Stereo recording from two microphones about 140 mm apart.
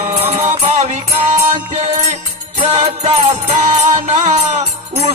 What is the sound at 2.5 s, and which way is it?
Music, 50° right (ahead or behind).